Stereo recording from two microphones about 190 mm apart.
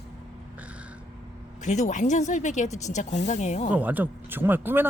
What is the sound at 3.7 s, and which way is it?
Speech, 10° right (ahead or behind).